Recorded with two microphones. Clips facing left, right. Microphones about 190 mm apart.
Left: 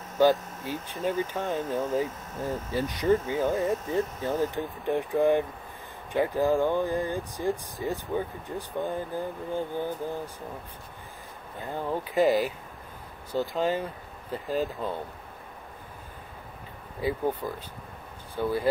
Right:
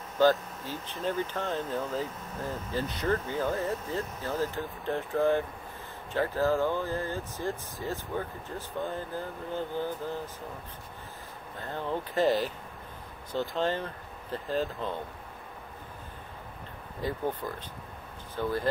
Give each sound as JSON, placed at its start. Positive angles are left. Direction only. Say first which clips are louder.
{"t": 0.2, "sound": "speech", "louder": "left 2 dB", "side_deg": 15}
{"t": 11.6, "sound": "speech", "louder": "left 2 dB", "side_deg": 10}
{"t": 17.0, "sound": "speech", "louder": "left 4 dB", "side_deg": 10}